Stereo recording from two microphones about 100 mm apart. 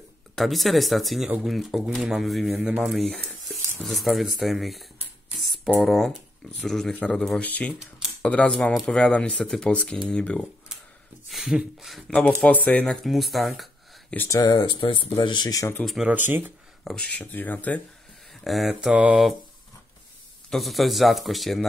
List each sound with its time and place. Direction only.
0.4 s speech: centre (ahead or behind)
11.2 s speech: centre (ahead or behind)
12.1 s speech: 10° left (ahead or behind)
12.8 s speech: centre (ahead or behind)
14.3 s speech: 40° left (ahead or behind); by 15.1 s 60° left (ahead or behind)
15.2 s speech: 45° left (ahead or behind)
15.8 s speech: centre (ahead or behind)
16.1 s speech: 20° right (ahead or behind)
16.8 s speech: 5° left (ahead or behind)
17.3 s speech: 20° left (ahead or behind)
18.3 s mantra: centre (ahead or behind)
20.4 s speech: centre (ahead or behind)